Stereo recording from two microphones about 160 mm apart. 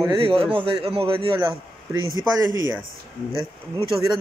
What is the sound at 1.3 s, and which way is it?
Speech, 20° right (ahead or behind).